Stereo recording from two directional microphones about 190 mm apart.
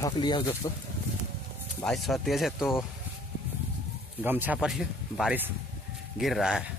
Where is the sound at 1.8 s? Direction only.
Centre (ahead or behind).